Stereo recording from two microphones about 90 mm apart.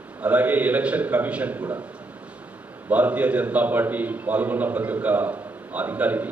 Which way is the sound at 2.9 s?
15° right (ahead or behind).